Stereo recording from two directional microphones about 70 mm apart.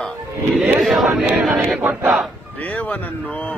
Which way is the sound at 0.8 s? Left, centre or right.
Centre.